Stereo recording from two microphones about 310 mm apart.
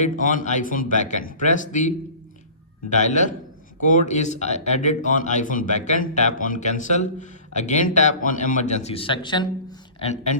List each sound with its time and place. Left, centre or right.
0.0 s speech: left
2.9 s speech: left